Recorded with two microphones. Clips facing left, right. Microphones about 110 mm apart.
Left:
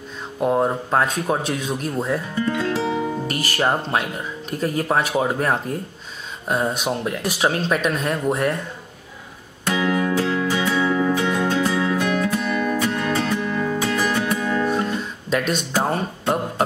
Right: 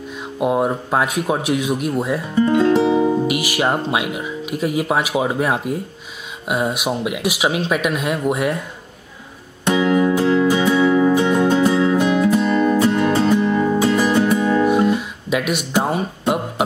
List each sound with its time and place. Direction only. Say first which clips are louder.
0.4 s speech: right 1 dB; 10° right (ahead or behind)
2.3 s speech: right 12 dB; 25° right (ahead or behind)
3.3 s speech: right 3 dB; 10° right (ahead or behind)
9.7 s music: right 5 dB; 20° right (ahead or behind)
14.4 s guitar: right 6 dB; 15° right (ahead or behind)